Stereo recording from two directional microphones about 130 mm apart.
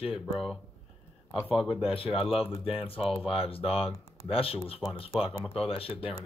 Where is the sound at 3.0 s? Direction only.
Centre (ahead or behind).